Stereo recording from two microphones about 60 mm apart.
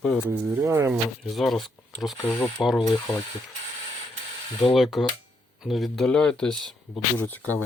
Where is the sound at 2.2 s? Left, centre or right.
Left.